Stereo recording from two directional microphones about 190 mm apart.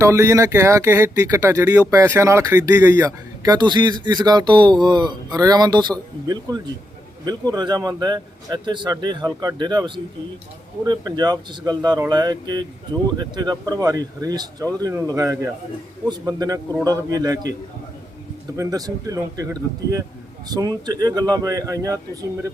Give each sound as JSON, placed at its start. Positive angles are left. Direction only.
{"t": 0.0, "sound": "speech", "side_deg": -15}
{"t": 18.5, "sound": "speech", "side_deg": -15}